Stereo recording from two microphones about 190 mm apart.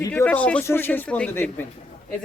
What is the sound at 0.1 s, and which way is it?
A man's voice, 10° left (ahead or behind).